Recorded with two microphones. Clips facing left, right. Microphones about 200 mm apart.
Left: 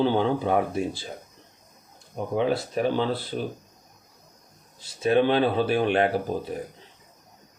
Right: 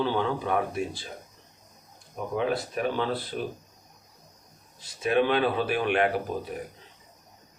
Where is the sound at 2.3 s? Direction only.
30° left (ahead or behind).